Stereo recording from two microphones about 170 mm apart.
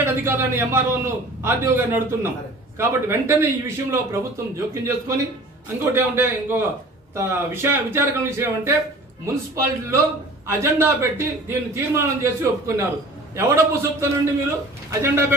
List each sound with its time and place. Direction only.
0.0 s a man's voice: 10° right (ahead or behind)